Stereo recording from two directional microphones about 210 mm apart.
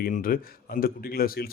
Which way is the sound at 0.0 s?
45° left (ahead or behind).